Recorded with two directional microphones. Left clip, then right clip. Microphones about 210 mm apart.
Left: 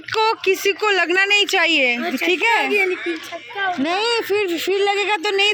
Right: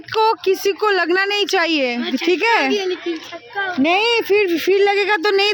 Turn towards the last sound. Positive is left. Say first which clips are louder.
# right 2 dB
turn(degrees=-35)  # may be behind; listen again after turning